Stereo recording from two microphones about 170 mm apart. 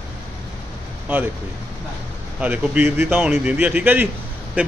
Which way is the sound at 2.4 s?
10° right (ahead or behind).